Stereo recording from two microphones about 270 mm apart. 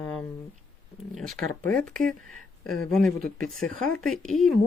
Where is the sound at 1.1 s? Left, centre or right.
Centre.